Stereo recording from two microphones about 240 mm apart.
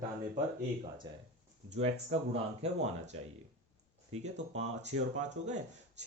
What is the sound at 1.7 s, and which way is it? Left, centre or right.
Speech, right.